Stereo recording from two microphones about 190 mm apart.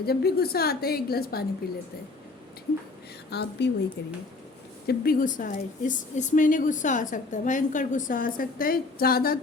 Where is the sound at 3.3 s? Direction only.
60° left (ahead or behind).